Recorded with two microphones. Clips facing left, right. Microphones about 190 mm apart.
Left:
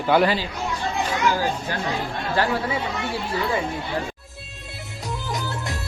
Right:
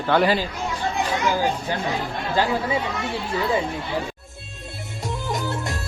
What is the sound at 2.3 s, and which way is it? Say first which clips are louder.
Speech: right 1 dB; 15° right (ahead or behind).